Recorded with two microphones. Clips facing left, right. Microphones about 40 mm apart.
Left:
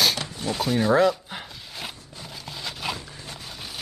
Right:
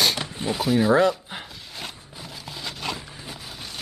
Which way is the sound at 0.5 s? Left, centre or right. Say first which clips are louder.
Right 2 dB; centre.